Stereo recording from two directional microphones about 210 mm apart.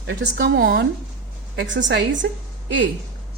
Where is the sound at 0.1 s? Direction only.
55° right (ahead or behind).